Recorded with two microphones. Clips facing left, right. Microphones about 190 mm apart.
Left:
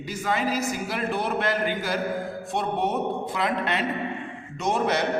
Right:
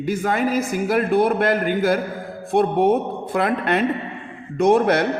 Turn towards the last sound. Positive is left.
turn(degrees=-55)  # may be behind; listen again after turning